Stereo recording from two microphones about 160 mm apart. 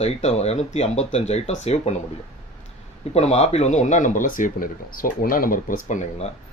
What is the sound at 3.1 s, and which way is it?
Speech, 40° left (ahead or behind).